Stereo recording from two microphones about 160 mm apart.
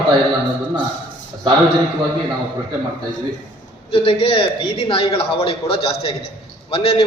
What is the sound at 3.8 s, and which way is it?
A man's voice, 35° left (ahead or behind).